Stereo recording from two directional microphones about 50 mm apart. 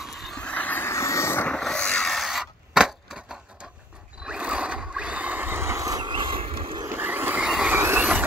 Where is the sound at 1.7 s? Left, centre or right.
Centre.